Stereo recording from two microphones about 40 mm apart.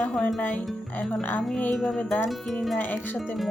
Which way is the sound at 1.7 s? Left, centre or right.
Centre.